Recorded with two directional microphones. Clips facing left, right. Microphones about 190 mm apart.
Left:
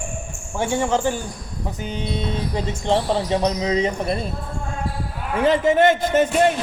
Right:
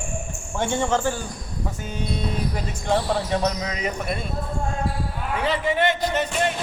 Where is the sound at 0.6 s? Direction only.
10° left (ahead or behind); by 4.2 s 30° left (ahead or behind).